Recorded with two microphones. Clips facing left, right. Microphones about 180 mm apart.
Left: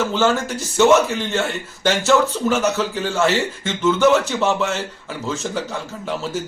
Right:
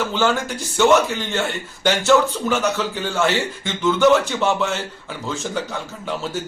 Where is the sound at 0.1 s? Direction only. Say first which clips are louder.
Left 2 dB; centre (ahead or behind).